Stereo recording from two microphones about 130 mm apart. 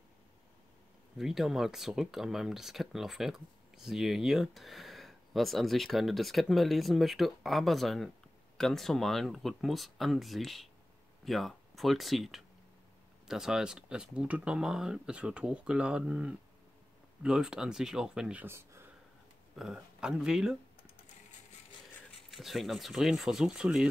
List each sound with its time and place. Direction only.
1.1 s speech: centre (ahead or behind)
18.4 s a sound: 20° right (ahead or behind)
19.5 s speech: 5° right (ahead or behind)
22.3 s speech: centre (ahead or behind)